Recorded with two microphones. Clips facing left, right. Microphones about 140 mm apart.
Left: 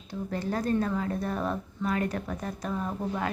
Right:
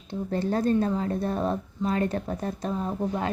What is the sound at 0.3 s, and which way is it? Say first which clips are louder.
A woman's voice: right 4 dB; 30° right (ahead or behind).